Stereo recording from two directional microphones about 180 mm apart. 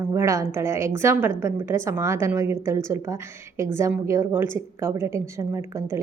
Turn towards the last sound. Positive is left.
turn(degrees=-15)  # may be behind; listen again after turning